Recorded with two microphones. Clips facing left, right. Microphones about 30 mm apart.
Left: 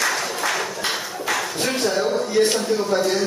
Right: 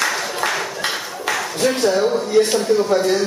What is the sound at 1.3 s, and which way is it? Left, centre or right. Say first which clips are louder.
Music: right 4 dB; centre.